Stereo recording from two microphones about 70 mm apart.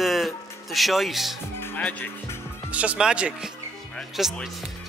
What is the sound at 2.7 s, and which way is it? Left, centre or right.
Speech, centre.